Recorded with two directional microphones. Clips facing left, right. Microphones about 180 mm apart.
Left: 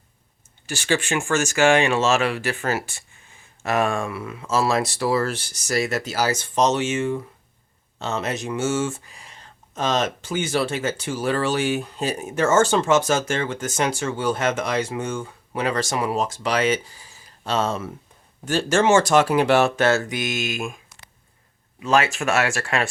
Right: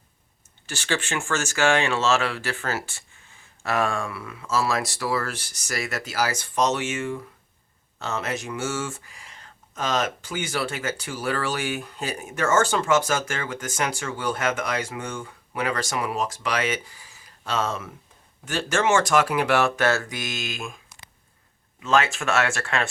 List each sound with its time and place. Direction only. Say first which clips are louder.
0.7 s speech: left 5 dB; 10° left (ahead or behind)
21.8 s speech: left 2 dB; 15° left (ahead or behind)